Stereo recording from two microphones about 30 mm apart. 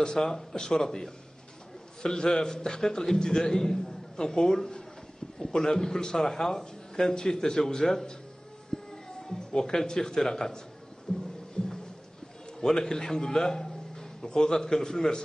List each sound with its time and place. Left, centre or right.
0.0 s a man's voice: left
2.0 s a man's voice: left
8.9 s a sound: left
9.8 s a man's voice: centre
11.1 s a man's voice: left
11.6 s a sound: left
12.5 s a man's voice: centre